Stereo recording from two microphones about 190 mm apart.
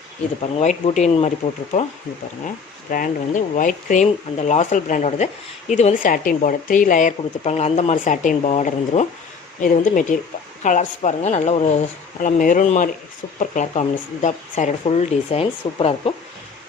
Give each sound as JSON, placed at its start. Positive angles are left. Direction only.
{"t": 0.6, "sound": "speech", "side_deg": 40}
{"t": 2.9, "sound": "speech", "side_deg": 45}